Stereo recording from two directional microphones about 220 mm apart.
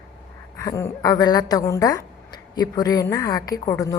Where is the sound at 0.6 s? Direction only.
15° left (ahead or behind).